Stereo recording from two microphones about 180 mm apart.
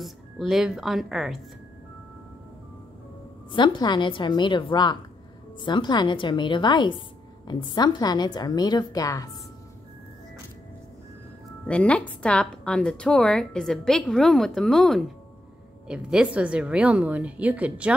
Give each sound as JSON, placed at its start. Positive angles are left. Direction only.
{"t": 0.0, "sound": "speech", "side_deg": 0}
{"t": 3.5, "sound": "a woman's voice", "side_deg": 25}
{"t": 11.6, "sound": "a woman's voice", "side_deg": 5}